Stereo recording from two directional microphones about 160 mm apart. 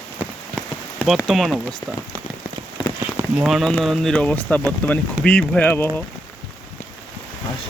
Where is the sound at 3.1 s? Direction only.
5° right (ahead or behind); by 5.9 s 10° left (ahead or behind).